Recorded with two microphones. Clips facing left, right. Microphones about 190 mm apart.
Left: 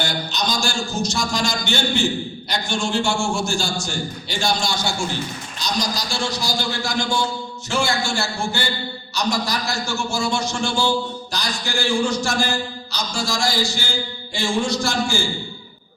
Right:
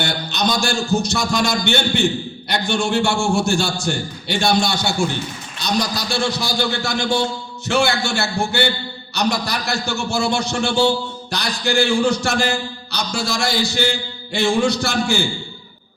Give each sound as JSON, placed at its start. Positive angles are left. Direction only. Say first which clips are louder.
{"t": 0.0, "sound": "a man's voice", "louder": "right 3 dB", "side_deg": -60}